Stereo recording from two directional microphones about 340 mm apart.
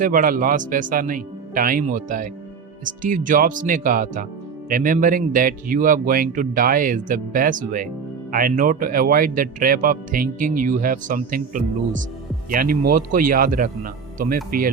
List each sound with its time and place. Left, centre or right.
0.0 s speech: right